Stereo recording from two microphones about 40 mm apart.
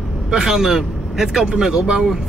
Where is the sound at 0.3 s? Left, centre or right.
Centre.